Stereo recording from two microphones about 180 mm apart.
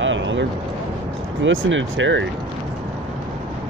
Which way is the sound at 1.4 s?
90° right.